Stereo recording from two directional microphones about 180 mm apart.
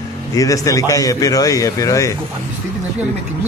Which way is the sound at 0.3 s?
20° left (ahead or behind).